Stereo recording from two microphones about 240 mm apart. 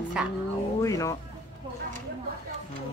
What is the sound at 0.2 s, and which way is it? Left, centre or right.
Speech, centre.